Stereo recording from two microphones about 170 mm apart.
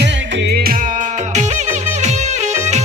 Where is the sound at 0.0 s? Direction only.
90° right.